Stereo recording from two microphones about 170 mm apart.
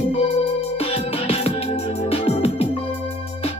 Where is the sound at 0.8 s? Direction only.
35° left (ahead or behind).